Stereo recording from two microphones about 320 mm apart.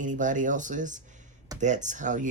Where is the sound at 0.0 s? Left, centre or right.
Right.